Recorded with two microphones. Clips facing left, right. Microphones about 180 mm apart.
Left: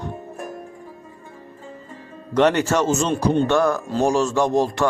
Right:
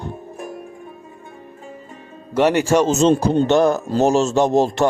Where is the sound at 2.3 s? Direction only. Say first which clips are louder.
Right 2 dB; 10° right (ahead or behind); by 4.9 s 25° right (ahead or behind).